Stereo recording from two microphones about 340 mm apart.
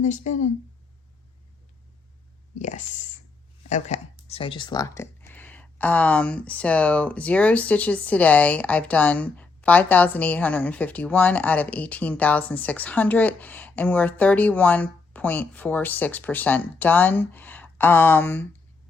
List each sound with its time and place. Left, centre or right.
0.0 s speech: left
2.6 s speech: left; by 18.4 s centre